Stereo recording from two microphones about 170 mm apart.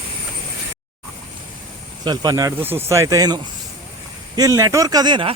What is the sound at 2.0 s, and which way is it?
Speech, 25° right (ahead or behind).